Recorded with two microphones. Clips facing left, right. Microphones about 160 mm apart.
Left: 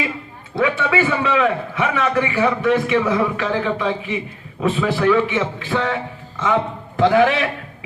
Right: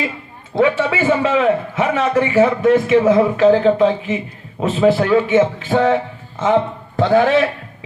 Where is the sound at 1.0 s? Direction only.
45° right (ahead or behind).